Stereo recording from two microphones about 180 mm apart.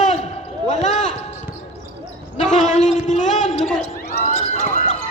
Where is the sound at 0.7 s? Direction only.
40° left (ahead or behind).